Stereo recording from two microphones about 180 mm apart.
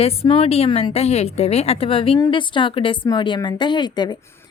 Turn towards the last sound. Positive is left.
turn(degrees=25)  # may be behind; listen again after turning